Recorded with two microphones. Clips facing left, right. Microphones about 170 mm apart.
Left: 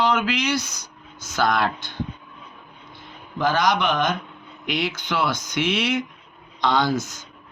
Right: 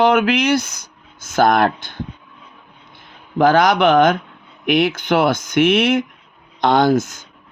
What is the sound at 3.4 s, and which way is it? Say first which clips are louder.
Speech: right 8 dB; 60° right (ahead or behind).